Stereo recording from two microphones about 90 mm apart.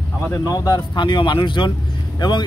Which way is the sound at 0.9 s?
60° left (ahead or behind).